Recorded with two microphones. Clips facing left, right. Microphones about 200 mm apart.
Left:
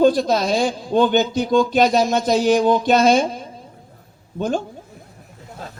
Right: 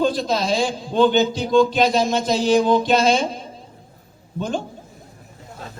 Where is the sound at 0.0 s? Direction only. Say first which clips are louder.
Left 5 dB; 50° left (ahead or behind).